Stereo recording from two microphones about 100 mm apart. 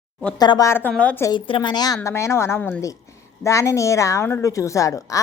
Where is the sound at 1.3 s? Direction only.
55° left (ahead or behind).